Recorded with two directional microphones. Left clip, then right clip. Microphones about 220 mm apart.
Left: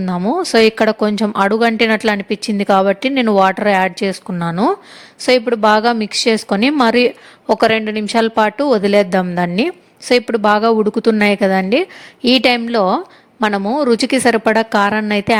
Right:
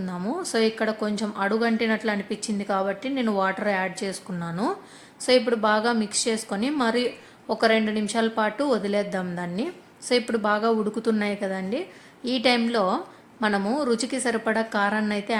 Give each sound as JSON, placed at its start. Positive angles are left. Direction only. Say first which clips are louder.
{"t": 0.0, "sound": "a woman's voice", "louder": "left 13 dB", "side_deg": 35}